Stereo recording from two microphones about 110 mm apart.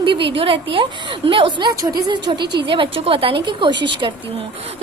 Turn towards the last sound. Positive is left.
turn(degrees=-45)  # may be behind; listen again after turning